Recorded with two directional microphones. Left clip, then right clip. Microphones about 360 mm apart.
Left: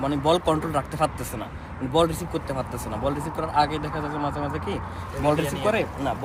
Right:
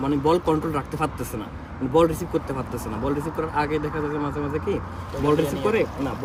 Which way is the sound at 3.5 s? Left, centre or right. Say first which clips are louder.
Left 3 dB; centre.